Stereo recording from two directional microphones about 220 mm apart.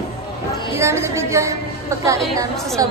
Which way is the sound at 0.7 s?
10° right (ahead or behind).